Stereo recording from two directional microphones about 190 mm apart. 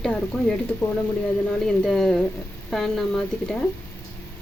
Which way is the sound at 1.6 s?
Centre (ahead or behind).